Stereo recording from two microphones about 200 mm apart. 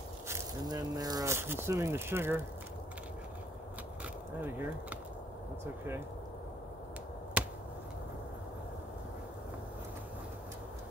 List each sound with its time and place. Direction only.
0.3 s speech: 20° right (ahead or behind)
4.4 s speech: 10° right (ahead or behind)